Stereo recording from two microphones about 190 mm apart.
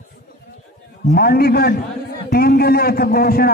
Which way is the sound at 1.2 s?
55° left (ahead or behind).